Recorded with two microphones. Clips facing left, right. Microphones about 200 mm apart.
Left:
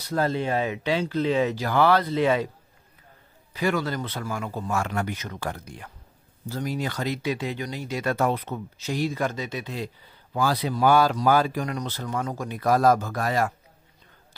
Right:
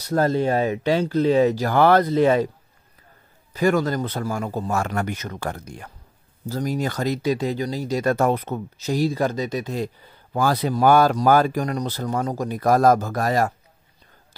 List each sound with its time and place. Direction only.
0.1 s speech: 45° right (ahead or behind)
3.5 s speech: 45° right (ahead or behind)